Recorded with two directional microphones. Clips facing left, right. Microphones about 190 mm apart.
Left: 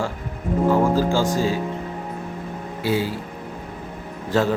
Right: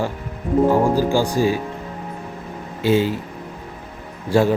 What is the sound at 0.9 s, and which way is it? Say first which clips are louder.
Speech: right 2 dB; 15° right (ahead or behind).